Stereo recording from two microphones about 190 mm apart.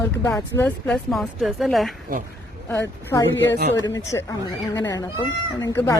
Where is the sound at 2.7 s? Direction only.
15° left (ahead or behind).